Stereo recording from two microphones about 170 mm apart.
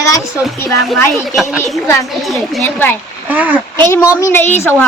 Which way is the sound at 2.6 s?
10° left (ahead or behind).